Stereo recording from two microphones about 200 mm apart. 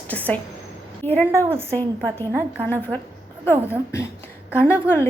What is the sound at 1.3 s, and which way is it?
Speech, 15° right (ahead or behind).